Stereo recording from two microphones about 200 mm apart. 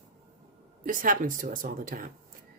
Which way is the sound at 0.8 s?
45° right (ahead or behind).